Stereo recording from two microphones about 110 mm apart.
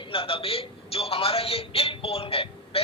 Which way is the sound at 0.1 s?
55° left (ahead or behind).